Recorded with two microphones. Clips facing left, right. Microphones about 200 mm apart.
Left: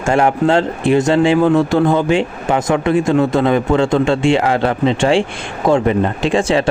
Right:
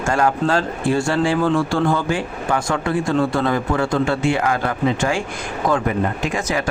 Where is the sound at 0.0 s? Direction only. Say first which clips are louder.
Left 5 dB; 25° left (ahead or behind).